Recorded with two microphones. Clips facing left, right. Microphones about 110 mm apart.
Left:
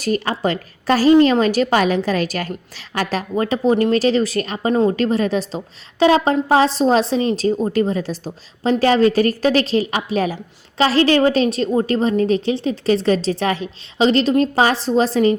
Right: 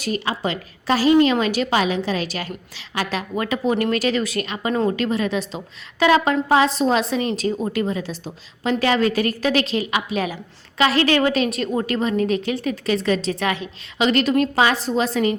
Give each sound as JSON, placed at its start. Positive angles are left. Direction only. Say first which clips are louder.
{"t": 0.0, "sound": "a woman's voice", "louder": "left 4 dB", "side_deg": 45}
{"t": 4.7, "sound": "speech", "louder": "left 4 dB", "side_deg": 20}
{"t": 4.9, "sound": "a woman's voice", "louder": "left 4 dB", "side_deg": 40}